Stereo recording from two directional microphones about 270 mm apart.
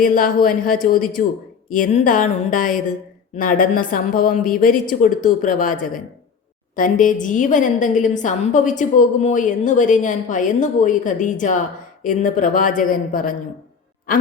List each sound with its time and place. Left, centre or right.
0.0 s a woman's voice: left